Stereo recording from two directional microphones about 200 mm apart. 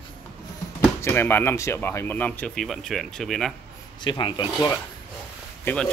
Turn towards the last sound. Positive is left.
turn(degrees=10)  # may be behind; listen again after turning